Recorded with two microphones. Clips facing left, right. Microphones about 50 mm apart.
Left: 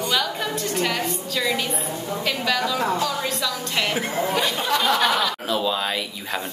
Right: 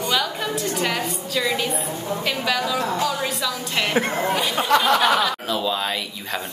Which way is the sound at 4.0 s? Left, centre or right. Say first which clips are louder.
Right 3 dB; right.